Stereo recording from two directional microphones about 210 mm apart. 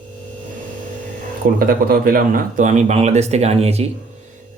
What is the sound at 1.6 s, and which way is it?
Speech, 45° right (ahead or behind).